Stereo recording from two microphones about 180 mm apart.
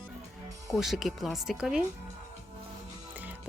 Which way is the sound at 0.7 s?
Centre (ahead or behind).